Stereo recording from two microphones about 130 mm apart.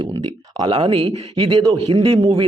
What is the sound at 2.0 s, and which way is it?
Speech, 45° right (ahead or behind).